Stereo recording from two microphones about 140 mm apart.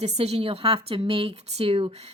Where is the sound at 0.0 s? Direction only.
50° right (ahead or behind).